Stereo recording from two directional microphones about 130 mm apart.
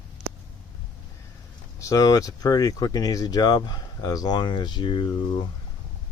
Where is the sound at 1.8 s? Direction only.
25° left (ahead or behind).